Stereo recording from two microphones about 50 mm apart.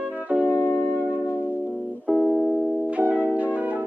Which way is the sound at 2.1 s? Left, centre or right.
Centre.